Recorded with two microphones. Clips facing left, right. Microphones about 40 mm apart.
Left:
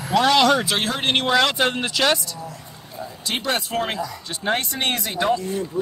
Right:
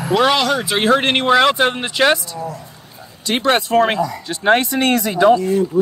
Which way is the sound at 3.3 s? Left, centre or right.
Right.